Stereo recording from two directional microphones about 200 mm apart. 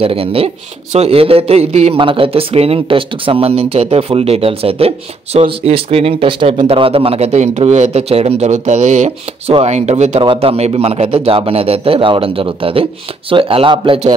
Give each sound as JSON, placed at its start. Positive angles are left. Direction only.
{"t": 0.0, "sound": "a man's voice", "side_deg": -30}